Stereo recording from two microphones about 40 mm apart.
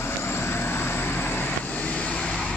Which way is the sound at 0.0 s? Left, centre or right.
Left.